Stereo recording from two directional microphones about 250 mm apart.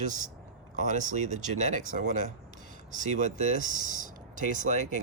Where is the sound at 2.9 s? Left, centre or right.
Right.